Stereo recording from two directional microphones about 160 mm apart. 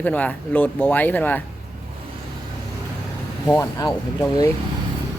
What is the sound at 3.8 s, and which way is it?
Speech, 25° left (ahead or behind).